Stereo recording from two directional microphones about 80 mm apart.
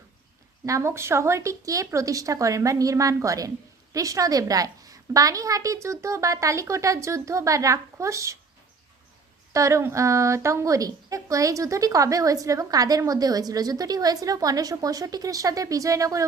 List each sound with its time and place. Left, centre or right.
0.6 s a woman's voice: right
9.5 s a woman's voice: right